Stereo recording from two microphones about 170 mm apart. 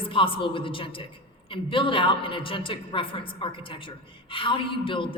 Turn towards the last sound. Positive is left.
turn(degrees=30)  # may be behind; listen again after turning